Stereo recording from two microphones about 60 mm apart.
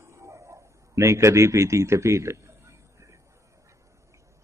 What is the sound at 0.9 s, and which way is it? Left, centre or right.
A man's voice, right.